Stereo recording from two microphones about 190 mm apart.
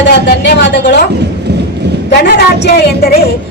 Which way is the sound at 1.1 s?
60° right (ahead or behind).